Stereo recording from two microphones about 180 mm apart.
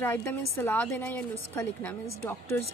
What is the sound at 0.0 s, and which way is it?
A woman's voice, 10° left (ahead or behind).